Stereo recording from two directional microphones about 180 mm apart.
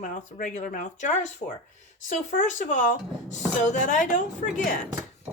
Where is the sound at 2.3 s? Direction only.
45° left (ahead or behind).